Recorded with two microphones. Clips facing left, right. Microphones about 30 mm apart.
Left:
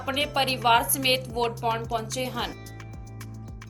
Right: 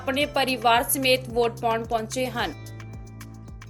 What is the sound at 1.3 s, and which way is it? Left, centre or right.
Speech, centre.